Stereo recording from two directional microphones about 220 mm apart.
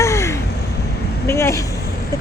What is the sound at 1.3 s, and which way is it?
Speech, 15° left (ahead or behind).